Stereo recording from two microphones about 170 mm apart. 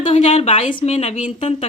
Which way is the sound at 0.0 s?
35° left (ahead or behind).